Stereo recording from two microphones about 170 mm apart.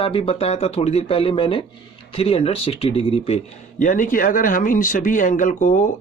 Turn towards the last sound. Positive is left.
turn(degrees=50)  # may be behind; listen again after turning